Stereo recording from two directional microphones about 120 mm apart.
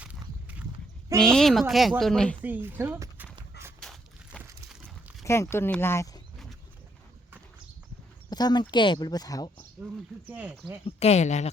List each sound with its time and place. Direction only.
0.0 s horse: 10° right (ahead or behind)
1.2 s speech: 5° left (ahead or behind)
2.4 s speech: 15° right (ahead or behind)
5.2 s speech: 20° left (ahead or behind)
8.3 s speech: 35° left (ahead or behind)
10.2 s speech: 15° right (ahead or behind)
10.8 s speech: 60° left (ahead or behind)